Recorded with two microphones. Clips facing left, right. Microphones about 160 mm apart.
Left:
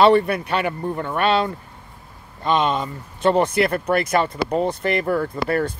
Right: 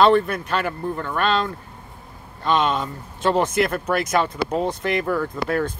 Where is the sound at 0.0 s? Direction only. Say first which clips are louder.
Left 2 dB; 5° left (ahead or behind).